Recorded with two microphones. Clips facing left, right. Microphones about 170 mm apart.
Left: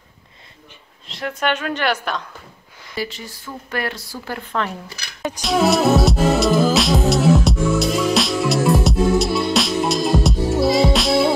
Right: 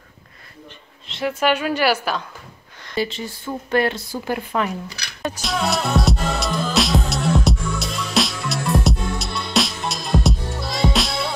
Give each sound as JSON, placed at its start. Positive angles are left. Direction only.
{"t": 1.0, "sound": "a woman's voice", "side_deg": 0}
{"t": 3.0, "sound": "speech", "side_deg": -25}
{"t": 5.4, "sound": "a woman's voice", "side_deg": 0}
{"t": 5.9, "sound": "music", "side_deg": 0}